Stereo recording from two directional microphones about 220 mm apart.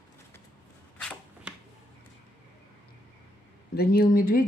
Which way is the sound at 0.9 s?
5° left (ahead or behind).